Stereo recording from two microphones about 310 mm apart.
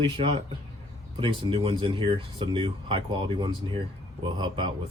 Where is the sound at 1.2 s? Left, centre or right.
Centre.